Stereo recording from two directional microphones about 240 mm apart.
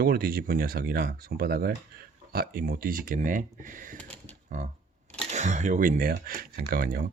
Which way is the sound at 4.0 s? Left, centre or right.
Centre.